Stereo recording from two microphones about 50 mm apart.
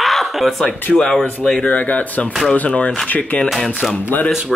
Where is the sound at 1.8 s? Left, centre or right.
Left.